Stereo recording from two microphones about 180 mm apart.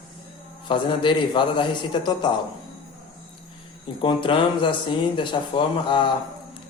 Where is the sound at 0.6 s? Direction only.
25° left (ahead or behind).